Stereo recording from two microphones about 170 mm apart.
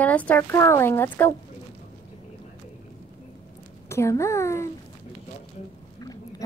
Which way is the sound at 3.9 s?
15° left (ahead or behind).